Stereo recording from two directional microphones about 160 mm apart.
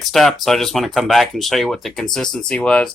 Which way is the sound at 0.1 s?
Centre (ahead or behind).